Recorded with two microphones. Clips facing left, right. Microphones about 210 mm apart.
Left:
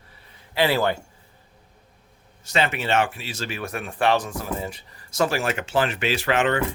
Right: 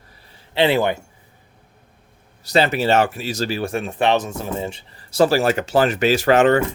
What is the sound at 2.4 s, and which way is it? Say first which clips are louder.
Speech: right 6 dB; 35° right (ahead or behind).